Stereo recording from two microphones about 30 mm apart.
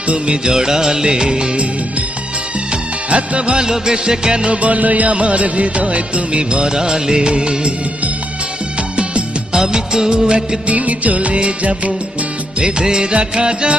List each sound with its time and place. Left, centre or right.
0.3 s music: right
3.1 s music: right
3.6 s music: right
4.6 s music: right
9.5 s music: right
10.7 s music of bollywood: right
11.3 s music: right
12.8 s music: right